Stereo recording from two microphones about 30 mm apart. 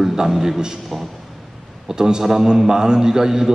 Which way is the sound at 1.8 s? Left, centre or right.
Centre.